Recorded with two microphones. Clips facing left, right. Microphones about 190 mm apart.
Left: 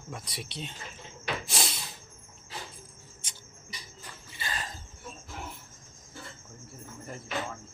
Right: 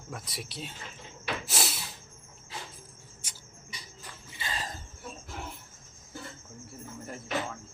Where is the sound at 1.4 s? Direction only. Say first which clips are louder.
Even; 5° right (ahead or behind).